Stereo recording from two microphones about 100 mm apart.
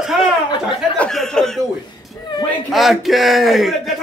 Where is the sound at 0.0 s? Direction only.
5° right (ahead or behind).